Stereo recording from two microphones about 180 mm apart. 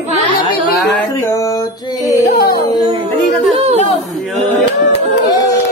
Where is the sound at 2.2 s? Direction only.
60° left (ahead or behind).